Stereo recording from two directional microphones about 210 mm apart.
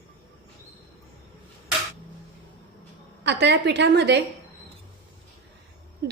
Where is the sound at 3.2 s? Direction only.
55° right (ahead or behind).